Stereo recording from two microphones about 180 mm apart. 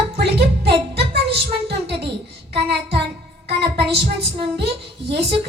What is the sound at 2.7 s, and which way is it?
Child singing, 65° right (ahead or behind).